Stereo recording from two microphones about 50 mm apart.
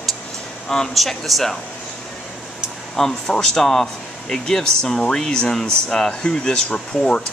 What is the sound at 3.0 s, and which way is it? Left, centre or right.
Speech, centre.